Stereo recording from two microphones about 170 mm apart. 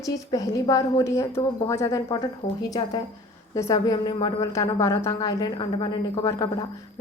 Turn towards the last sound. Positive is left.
turn(degrees=20)  # may be behind; listen again after turning